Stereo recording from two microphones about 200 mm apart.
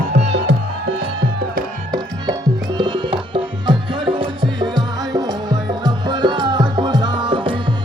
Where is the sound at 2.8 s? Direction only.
25° right (ahead or behind).